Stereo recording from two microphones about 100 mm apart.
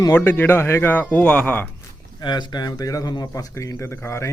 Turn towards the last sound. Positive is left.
turn(degrees=25)  # may be behind; listen again after turning